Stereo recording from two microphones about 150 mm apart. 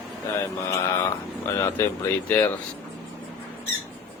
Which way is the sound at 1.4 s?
15° left (ahead or behind).